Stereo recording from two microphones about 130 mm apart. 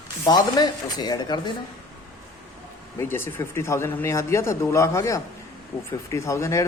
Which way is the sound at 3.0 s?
20° left (ahead or behind).